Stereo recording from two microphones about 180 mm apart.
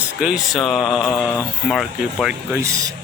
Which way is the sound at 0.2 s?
5° right (ahead or behind).